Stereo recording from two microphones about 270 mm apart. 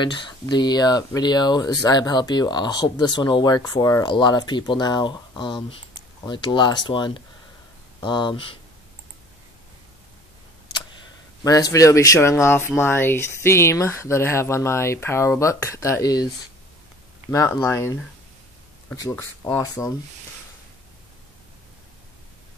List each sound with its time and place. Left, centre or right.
0.0 s speech: centre
11.4 s speech: centre
17.3 s speech: centre